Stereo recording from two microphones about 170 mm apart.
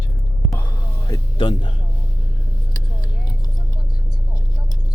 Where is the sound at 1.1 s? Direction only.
25° left (ahead or behind).